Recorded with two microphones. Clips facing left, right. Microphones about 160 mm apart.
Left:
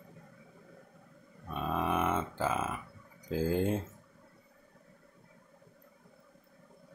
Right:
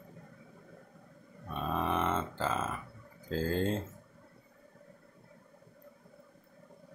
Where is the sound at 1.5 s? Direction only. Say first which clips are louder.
Left 1 dB; 5° left (ahead or behind).